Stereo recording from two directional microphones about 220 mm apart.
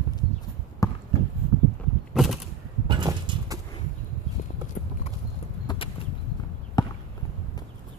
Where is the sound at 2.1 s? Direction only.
Centre (ahead or behind).